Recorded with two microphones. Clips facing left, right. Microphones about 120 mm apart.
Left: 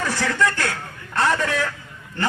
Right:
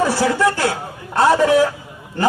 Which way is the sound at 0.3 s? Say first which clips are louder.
Right 5 dB; 15° right (ahead or behind).